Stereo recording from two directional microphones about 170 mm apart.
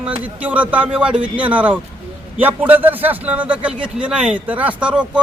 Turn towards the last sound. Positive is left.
turn(degrees=-5)  # may be behind; listen again after turning